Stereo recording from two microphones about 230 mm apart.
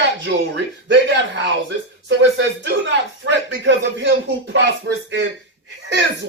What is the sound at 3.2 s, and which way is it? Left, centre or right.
Speech, right.